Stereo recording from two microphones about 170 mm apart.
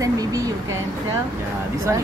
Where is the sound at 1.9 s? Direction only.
15° right (ahead or behind).